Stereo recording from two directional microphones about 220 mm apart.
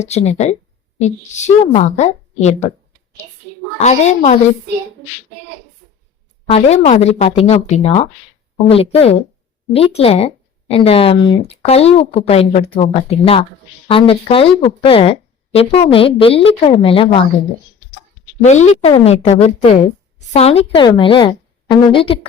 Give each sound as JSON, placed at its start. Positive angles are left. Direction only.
{"t": 0.0, "sound": "a woman's voice", "side_deg": 30}
{"t": 3.8, "sound": "a woman's voice", "side_deg": 30}
{"t": 6.5, "sound": "a woman's voice", "side_deg": 30}
{"t": 18.4, "sound": "a woman's voice", "side_deg": 30}